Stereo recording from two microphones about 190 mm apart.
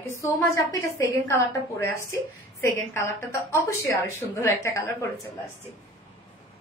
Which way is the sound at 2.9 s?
15° left (ahead or behind).